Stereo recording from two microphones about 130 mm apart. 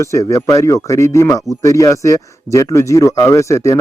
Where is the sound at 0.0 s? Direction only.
25° left (ahead or behind).